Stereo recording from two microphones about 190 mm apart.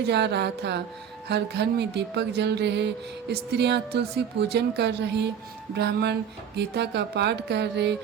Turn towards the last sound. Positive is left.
turn(degrees=-60)  # may be behind; listen again after turning